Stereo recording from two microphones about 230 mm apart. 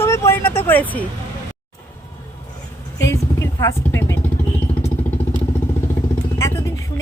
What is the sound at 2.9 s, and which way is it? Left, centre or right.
Vehicle, centre.